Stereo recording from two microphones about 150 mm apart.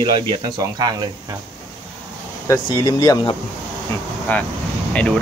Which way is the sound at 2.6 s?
30° left (ahead or behind).